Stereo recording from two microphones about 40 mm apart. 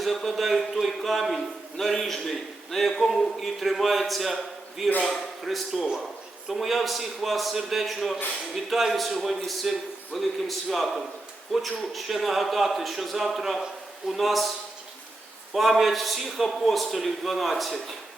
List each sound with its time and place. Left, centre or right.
0.0 s a man's voice: centre
15.5 s a man's voice: centre